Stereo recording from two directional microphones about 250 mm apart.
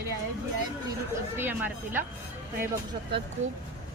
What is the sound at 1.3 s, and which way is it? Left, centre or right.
Speech, centre.